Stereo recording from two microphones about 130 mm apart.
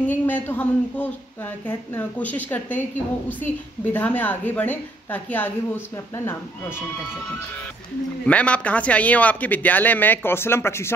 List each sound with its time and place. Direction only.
0.0 s speech: 15° left (ahead or behind)
8.3 s speech: 10° left (ahead or behind)